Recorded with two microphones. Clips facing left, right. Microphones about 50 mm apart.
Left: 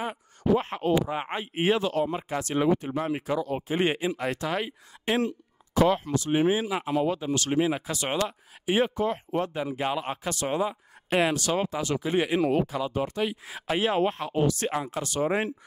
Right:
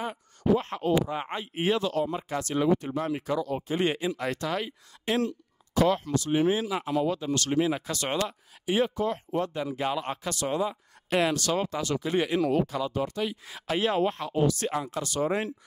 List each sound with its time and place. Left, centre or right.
0.0 s speech: centre
8.6 s speech: left
14.3 s speech: left